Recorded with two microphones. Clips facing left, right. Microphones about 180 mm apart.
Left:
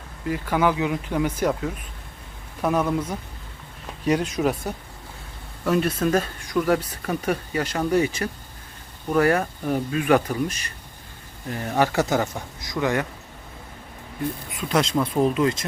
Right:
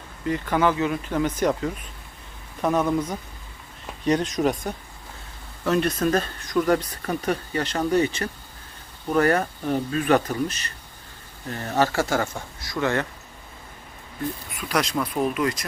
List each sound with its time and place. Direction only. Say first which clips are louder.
0.3 s speech: even; 5° left (ahead or behind)
14.7 s speech: left 3 dB; 25° left (ahead or behind)